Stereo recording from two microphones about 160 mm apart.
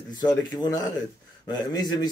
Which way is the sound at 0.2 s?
25° left (ahead or behind).